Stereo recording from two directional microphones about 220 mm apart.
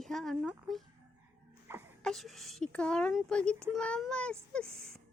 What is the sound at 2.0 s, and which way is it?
A child's voice, centre (ahead or behind).